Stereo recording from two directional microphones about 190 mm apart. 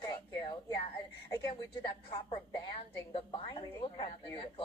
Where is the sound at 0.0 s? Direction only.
25° left (ahead or behind).